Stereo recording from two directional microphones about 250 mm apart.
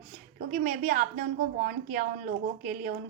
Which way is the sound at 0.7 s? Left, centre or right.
Right.